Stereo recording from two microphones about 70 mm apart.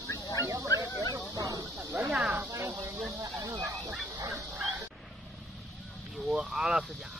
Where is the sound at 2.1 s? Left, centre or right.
Centre.